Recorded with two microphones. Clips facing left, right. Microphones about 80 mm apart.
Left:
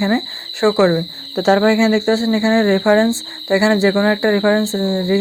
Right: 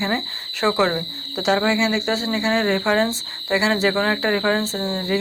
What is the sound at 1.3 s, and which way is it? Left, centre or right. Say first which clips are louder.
Speech: left 6 dB; left.